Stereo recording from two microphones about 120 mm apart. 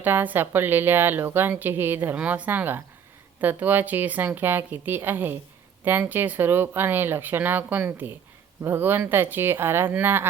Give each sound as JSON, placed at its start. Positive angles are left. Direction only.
{"t": 0.0, "sound": "a woman's voice", "side_deg": -15}